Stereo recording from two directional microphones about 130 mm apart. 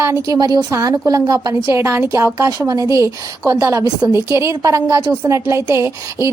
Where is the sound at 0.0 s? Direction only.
25° right (ahead or behind).